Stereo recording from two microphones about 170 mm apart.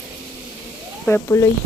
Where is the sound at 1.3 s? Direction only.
20° left (ahead or behind).